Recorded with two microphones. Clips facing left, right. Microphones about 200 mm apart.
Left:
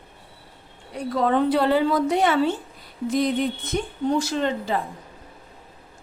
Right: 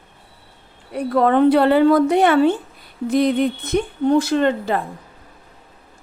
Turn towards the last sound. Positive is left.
turn(degrees=-60)  # may be behind; listen again after turning